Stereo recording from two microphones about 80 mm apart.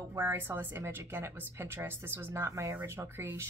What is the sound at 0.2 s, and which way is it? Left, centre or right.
Speech, right.